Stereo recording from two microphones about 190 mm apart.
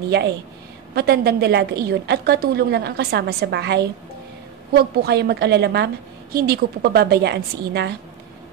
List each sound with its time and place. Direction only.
0.9 s a woman's voice: 55° right (ahead or behind)